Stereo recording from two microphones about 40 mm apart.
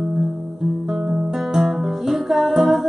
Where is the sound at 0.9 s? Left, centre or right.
Centre.